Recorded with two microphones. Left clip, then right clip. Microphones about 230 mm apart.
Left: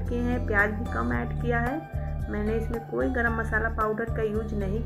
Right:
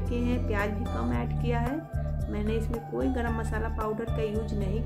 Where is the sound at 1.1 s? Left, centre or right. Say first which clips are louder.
Left 3 dB; right.